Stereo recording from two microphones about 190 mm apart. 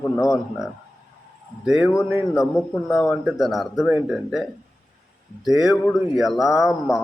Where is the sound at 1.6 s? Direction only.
5° right (ahead or behind).